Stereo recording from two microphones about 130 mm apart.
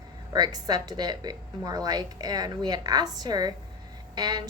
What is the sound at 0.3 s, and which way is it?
A woman's voice, 30° right (ahead or behind).